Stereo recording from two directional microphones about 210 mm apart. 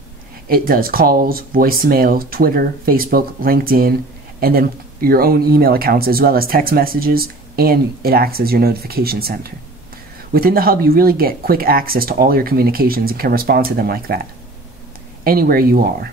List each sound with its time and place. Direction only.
0.5 s speech: 45° right (ahead or behind)
15.2 s speech: 45° right (ahead or behind)